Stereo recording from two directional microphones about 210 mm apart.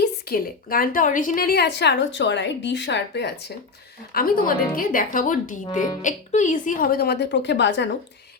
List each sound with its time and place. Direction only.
0.0 s a woman's voice: 45° left (ahead or behind)